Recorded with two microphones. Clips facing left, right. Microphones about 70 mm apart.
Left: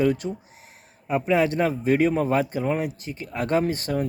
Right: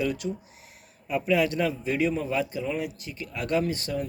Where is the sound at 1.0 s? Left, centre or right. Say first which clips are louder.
Left 3 dB; left.